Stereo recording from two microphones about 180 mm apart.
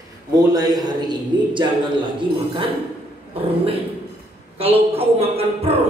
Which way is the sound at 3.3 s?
30° right (ahead or behind).